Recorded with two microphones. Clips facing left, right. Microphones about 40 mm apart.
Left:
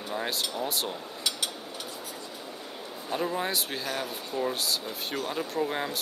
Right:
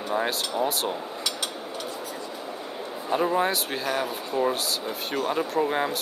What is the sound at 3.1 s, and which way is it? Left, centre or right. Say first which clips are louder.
Speech: right 6 dB; centre.